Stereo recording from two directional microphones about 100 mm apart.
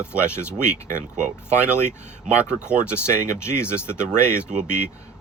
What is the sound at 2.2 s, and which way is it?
Speech, 10° right (ahead or behind).